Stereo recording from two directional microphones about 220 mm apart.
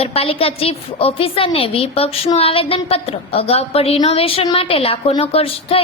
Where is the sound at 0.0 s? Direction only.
25° left (ahead or behind).